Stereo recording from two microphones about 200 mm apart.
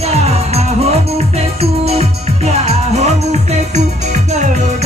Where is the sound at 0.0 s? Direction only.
30° right (ahead or behind).